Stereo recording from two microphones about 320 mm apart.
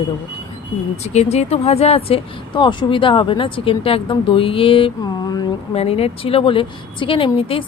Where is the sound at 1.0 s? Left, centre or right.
Centre.